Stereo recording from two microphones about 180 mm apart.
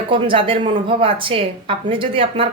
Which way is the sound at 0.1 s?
30° right (ahead or behind).